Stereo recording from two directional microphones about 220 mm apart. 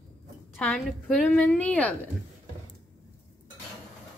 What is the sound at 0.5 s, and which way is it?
A woman's voice, 5° left (ahead or behind).